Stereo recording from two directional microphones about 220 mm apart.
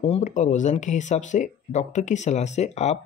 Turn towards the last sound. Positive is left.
turn(degrees=30)  # may be behind; listen again after turning